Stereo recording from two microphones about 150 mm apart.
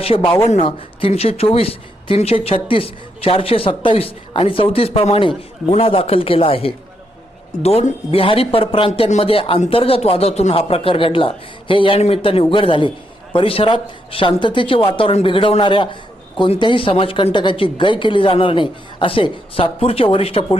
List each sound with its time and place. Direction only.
0.0 s speech: 40° left (ahead or behind)
8.9 s speech: 50° left (ahead or behind)